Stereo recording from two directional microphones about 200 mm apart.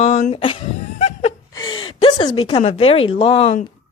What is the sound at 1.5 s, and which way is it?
A woman's voice, 20° left (ahead or behind).